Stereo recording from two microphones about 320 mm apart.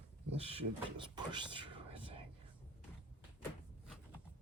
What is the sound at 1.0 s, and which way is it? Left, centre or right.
Whispering, centre.